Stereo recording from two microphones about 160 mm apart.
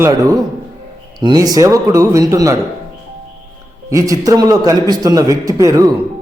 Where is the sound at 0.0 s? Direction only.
20° right (ahead or behind).